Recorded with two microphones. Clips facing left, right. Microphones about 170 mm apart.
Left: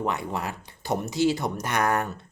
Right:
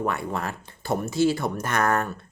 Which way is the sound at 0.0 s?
20° left (ahead or behind).